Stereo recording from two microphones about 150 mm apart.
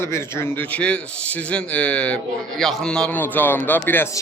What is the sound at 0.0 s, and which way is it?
A man's voice, 15° left (ahead or behind).